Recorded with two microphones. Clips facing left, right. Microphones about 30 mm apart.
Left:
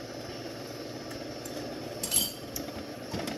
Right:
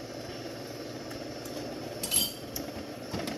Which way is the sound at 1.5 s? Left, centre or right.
Centre.